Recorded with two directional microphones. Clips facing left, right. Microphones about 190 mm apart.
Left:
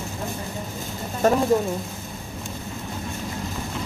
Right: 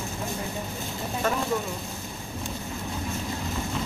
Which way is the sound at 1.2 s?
40° left (ahead or behind).